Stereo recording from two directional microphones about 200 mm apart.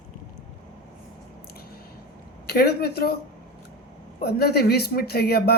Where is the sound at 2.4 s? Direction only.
55° left (ahead or behind).